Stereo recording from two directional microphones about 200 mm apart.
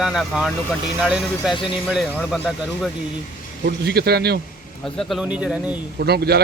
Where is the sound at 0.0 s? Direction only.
Centre (ahead or behind).